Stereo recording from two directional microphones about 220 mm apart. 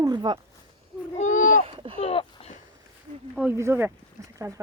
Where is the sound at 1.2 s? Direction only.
35° left (ahead or behind).